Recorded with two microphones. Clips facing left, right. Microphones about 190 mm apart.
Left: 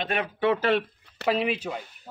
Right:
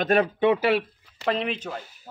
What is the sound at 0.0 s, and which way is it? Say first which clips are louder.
Speech: right 8 dB; 40° right (ahead or behind).